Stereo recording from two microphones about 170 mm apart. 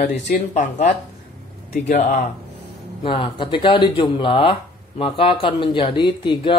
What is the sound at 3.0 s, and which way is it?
Speech, 30° left (ahead or behind).